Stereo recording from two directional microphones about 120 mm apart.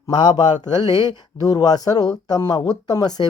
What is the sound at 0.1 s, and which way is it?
Speech, 35° left (ahead or behind).